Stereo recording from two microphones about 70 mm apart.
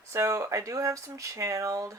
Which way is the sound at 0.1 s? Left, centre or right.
Right.